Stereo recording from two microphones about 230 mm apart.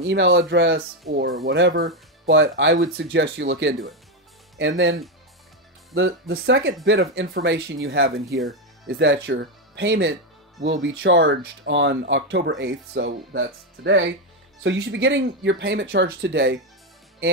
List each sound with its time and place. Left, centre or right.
0.0 s speech: right
6.7 s speech: right